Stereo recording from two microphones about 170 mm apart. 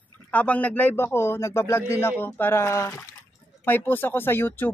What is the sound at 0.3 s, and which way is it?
A man's voice, 10° left (ahead or behind).